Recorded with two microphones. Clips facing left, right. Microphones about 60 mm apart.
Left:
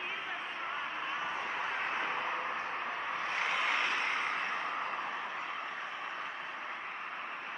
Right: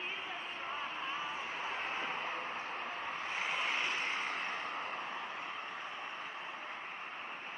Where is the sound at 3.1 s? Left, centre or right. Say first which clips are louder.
Left 5 dB; left.